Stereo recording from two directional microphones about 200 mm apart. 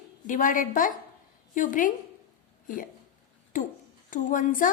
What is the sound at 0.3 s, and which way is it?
A woman's voice, 40° left (ahead or behind).